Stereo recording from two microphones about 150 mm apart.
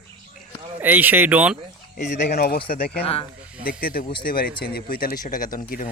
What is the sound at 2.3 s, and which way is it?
Speech, 90° left.